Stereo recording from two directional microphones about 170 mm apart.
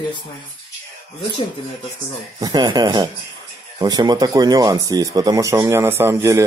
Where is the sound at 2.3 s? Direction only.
25° right (ahead or behind).